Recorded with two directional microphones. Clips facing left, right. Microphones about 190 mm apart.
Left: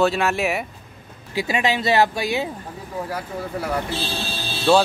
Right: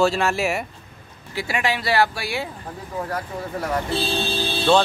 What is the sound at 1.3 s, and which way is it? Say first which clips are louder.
Speech: left 3 dB; 20° left (ahead or behind).